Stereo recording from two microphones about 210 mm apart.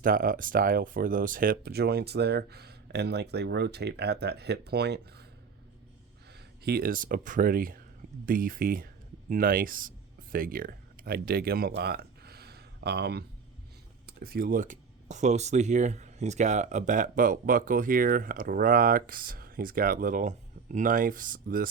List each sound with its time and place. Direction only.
0.0 s speech: 40° right (ahead or behind)
6.6 s speech: 50° right (ahead or behind)